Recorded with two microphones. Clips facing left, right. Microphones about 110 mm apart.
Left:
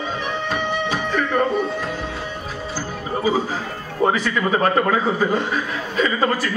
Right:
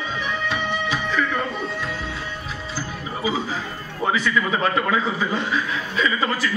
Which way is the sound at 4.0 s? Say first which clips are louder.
Left 3 dB; 40° left (ahead or behind).